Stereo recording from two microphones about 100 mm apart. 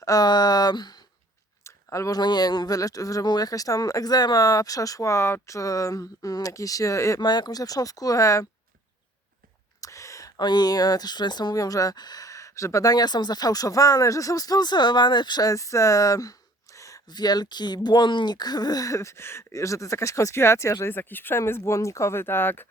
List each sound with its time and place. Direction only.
0.0 s speech: 40° left (ahead or behind)
1.6 s speech: 30° left (ahead or behind)
7.2 s speech: 45° left (ahead or behind)
9.8 s speech: 30° left (ahead or behind)